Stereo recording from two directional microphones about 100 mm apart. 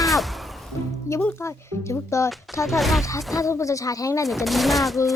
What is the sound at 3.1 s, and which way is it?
Speech, 30° left (ahead or behind).